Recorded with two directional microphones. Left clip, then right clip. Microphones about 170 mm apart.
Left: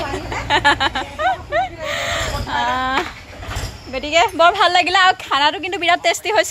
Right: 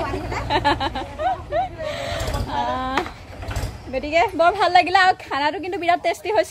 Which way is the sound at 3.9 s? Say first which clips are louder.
Left 3 dB; centre (ahead or behind).